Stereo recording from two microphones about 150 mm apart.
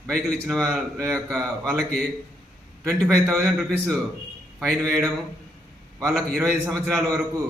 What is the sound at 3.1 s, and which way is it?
A man's voice, 5° left (ahead or behind).